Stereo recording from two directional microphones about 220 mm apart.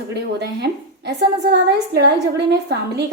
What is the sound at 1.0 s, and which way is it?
A woman's voice, 50° right (ahead or behind).